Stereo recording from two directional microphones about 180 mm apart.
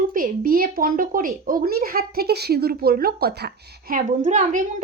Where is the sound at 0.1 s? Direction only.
50° right (ahead or behind).